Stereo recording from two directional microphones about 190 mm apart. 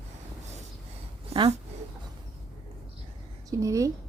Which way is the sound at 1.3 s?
30° right (ahead or behind).